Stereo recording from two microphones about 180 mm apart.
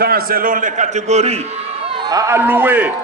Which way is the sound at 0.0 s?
55° right (ahead or behind).